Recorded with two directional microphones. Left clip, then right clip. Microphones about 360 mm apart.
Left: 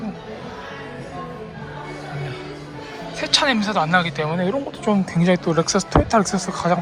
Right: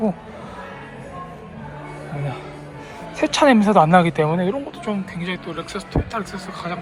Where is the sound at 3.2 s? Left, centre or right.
Centre.